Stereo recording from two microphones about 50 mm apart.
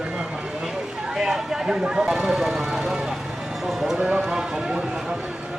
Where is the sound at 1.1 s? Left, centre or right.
Centre.